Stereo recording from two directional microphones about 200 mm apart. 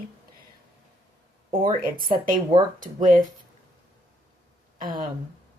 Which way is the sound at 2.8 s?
40° right (ahead or behind).